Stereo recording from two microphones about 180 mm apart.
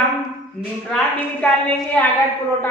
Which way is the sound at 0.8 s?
5° left (ahead or behind).